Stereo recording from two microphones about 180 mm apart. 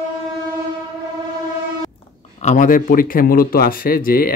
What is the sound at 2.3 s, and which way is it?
Speech, 45° left (ahead or behind).